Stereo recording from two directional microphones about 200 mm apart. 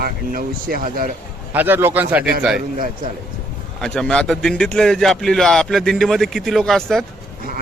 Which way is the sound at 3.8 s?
5° left (ahead or behind).